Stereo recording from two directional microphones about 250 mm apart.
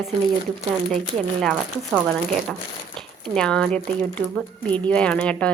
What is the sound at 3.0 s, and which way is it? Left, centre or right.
Speech, centre.